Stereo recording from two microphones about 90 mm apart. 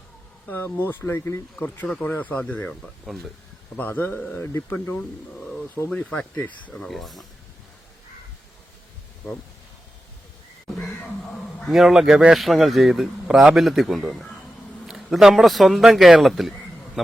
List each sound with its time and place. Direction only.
0.4 s speech: 20° left (ahead or behind)
1.5 s speech: 15° left (ahead or behind)
2.6 s speech: centre (ahead or behind)
3.8 s speech: 20° left (ahead or behind)
6.8 s speech: centre (ahead or behind)
10.8 s speech: 5° left (ahead or behind)